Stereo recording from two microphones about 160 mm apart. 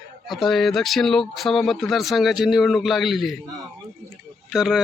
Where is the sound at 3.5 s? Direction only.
20° right (ahead or behind).